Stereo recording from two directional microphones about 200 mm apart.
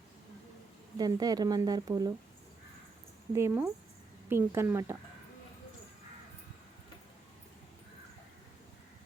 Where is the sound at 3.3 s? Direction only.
10° right (ahead or behind).